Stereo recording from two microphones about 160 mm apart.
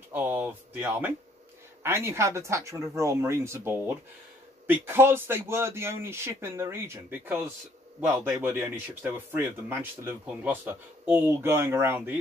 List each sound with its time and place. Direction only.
0.1 s speech: 10° right (ahead or behind)